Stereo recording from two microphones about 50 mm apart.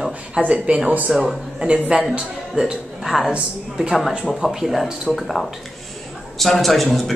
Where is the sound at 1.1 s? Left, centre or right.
Centre.